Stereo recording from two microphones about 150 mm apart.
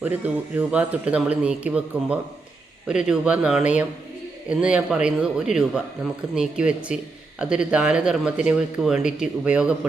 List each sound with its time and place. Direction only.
0.5 s a man's voice: 10° right (ahead or behind)